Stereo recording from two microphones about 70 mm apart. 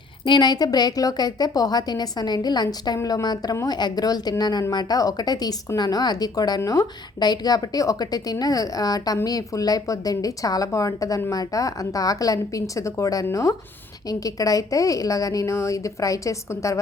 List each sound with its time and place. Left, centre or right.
0.3 s a woman's voice: left
3.7 s a woman's voice: left